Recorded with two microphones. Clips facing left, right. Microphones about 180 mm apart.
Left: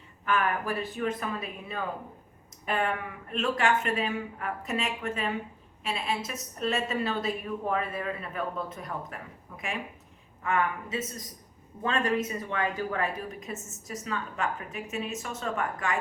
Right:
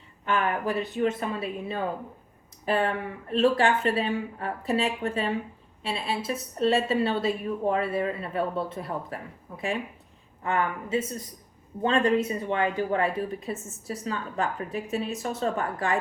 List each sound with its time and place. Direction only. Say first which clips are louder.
0.3 s speech: right 2 dB; 25° right (ahead or behind)
10.4 s speech: right 1 dB; 30° right (ahead or behind)